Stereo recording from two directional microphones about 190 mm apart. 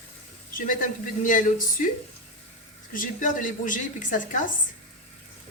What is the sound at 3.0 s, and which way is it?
A woman's voice, 45° left (ahead or behind).